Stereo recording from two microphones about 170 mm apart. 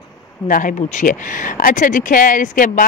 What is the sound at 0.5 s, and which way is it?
Speech, 50° left (ahead or behind).